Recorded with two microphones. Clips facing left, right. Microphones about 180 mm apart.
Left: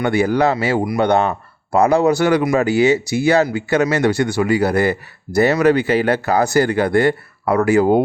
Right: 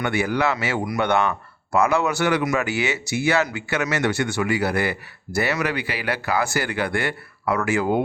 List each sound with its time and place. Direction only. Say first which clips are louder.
0.0 s a man's voice: left 6 dB; 35° left (ahead or behind)